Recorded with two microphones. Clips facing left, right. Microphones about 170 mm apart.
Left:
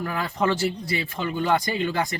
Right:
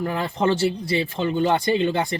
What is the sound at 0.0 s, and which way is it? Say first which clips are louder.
Speech: right 3 dB; 25° right (ahead or behind).